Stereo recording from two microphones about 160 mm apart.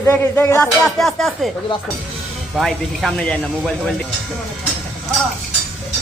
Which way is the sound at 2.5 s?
Centre (ahead or behind).